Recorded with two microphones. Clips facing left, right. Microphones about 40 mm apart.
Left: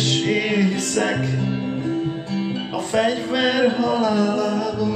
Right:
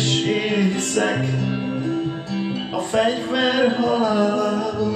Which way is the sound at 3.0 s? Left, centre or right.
Right.